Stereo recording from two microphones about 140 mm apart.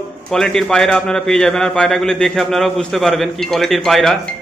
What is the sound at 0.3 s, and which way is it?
A man's voice, 5° left (ahead or behind).